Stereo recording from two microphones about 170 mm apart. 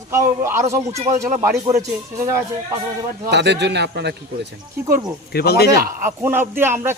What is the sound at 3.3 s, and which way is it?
Speech, 90° right.